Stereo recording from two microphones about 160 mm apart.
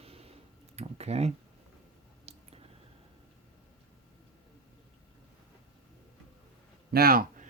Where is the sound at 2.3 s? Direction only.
45° right (ahead or behind).